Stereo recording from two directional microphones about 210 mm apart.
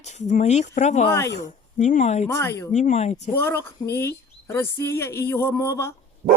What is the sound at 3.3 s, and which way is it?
Speech, 10° left (ahead or behind).